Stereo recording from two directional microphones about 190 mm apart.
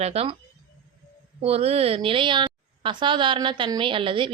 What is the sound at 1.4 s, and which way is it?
A woman's voice, 30° right (ahead or behind).